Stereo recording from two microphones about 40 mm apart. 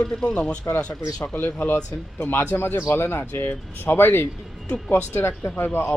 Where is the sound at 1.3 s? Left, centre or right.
Left.